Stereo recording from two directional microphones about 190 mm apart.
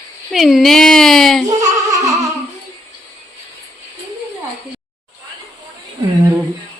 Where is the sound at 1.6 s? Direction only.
15° right (ahead or behind).